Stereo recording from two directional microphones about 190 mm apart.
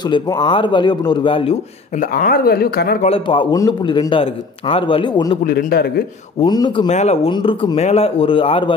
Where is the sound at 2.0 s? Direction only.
50° left (ahead or behind).